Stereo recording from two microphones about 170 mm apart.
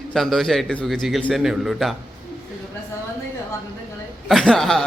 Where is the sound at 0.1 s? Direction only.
Centre (ahead or behind).